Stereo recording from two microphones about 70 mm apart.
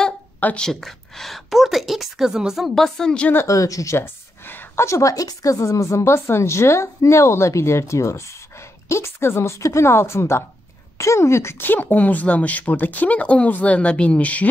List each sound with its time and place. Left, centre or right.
0.6 s a woman's voice: centre
3.4 s speech: left
3.9 s speech: left
4.8 s speech: left